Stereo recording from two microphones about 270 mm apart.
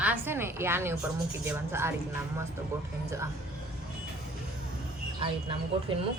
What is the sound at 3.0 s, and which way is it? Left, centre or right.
Speech, centre.